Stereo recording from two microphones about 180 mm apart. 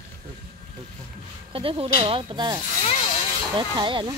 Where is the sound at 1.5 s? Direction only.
30° right (ahead or behind).